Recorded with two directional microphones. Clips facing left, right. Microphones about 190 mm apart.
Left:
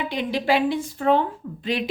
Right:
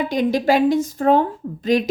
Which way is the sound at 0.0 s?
45° right (ahead or behind).